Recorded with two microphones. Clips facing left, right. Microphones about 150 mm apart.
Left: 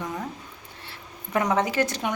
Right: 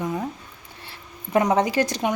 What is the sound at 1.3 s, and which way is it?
Speech, 30° right (ahead or behind).